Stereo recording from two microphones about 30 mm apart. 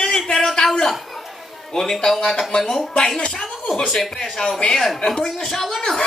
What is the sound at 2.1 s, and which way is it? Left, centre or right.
Speech, centre.